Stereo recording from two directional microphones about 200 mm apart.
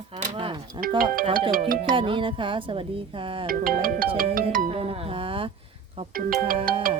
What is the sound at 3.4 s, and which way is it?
Music, 45° right (ahead or behind).